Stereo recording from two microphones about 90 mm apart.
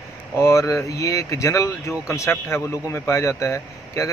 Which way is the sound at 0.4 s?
35° left (ahead or behind).